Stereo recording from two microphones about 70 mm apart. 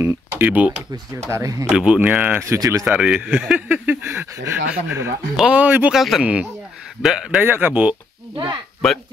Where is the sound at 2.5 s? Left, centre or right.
Right.